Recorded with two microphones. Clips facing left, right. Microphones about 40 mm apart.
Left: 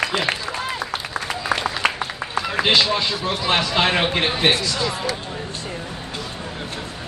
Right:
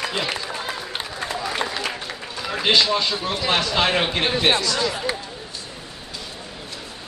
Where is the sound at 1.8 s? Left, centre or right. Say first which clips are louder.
Left 7 dB; left.